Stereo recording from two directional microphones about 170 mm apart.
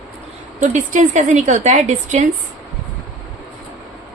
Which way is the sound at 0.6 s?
50° right (ahead or behind).